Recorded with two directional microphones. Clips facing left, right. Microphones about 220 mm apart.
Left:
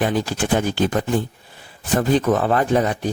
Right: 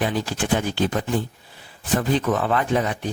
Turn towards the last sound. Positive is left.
turn(degrees=40)  # may be behind; listen again after turning